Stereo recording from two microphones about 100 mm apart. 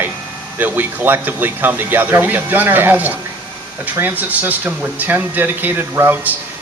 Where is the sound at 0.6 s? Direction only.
20° right (ahead or behind).